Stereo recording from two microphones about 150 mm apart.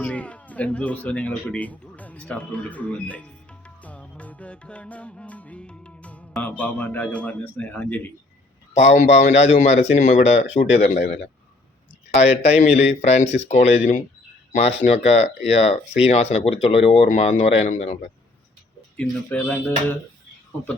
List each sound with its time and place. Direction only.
0.0 s speech: 10° left (ahead or behind)
3.8 s music: 10° left (ahead or behind)
8.8 s speech: 50° left (ahead or behind)
10.8 s a man's voice: 70° left (ahead or behind)
12.1 s speech: 45° left (ahead or behind)
18.9 s speech: 10° left (ahead or behind)